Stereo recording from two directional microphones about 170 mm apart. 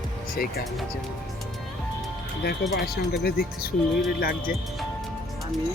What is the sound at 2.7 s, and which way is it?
Speech, 65° left (ahead or behind).